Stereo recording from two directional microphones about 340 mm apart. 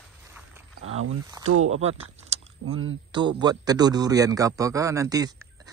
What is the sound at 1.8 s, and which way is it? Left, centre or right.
Speech, centre.